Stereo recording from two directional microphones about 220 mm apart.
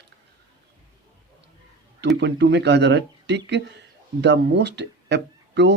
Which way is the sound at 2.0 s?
50° right (ahead or behind).